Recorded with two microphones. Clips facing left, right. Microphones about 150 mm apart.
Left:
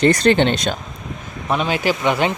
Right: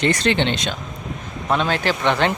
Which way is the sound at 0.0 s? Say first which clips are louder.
Left 5 dB; 40° left (ahead or behind).